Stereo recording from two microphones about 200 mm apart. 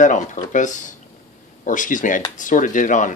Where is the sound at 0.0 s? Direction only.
40° left (ahead or behind).